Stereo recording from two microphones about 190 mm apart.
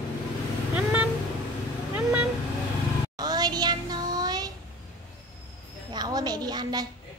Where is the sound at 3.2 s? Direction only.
20° right (ahead or behind).